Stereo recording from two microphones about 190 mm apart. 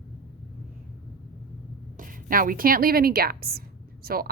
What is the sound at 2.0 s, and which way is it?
A woman's voice, 45° right (ahead or behind).